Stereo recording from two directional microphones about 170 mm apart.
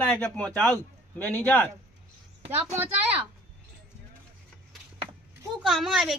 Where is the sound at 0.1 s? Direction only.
5° left (ahead or behind).